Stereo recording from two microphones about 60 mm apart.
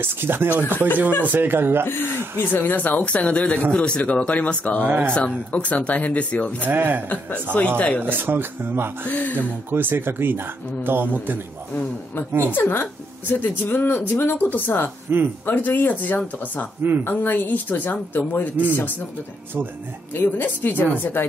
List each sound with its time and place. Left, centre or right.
0.0 s speech: right
2.3 s speech: left
4.8 s speech: right
5.5 s speech: left
6.6 s speech: right
7.7 s speech: left
8.0 s speech: right
9.0 s speech: left
9.4 s speech: right
12.5 s speech: left
15.1 s speech: right
15.4 s speech: left
20.2 s speech: left